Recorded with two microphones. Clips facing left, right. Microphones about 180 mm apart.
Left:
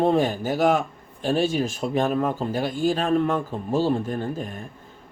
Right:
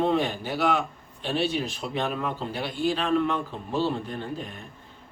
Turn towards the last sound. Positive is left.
turn(degrees=45)  # may be behind; listen again after turning